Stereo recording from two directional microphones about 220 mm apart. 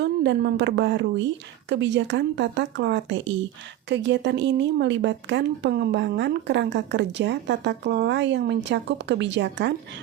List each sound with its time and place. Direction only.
0.0 s speech: 50° right (ahead or behind)